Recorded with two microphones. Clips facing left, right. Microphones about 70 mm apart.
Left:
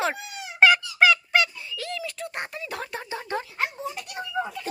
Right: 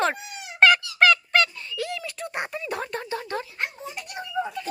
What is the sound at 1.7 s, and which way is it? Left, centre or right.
Speech, centre.